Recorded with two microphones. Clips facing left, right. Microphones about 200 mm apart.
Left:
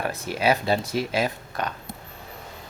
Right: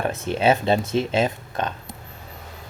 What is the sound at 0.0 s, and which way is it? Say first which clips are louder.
Speech: right 4 dB; 25° right (ahead or behind).